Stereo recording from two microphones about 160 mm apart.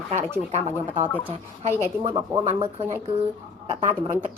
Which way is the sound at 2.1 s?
25° right (ahead or behind).